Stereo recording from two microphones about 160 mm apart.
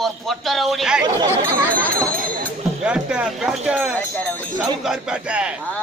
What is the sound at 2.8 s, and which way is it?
Speech, 5° right (ahead or behind).